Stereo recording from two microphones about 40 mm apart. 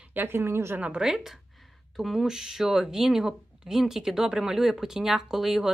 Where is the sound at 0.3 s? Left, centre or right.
Right.